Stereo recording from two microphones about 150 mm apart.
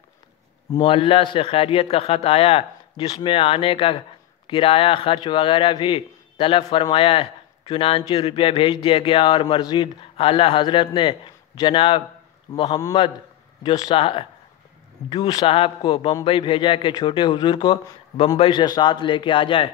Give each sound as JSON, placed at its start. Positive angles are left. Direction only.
{"t": 0.7, "sound": "a man's voice", "side_deg": 35}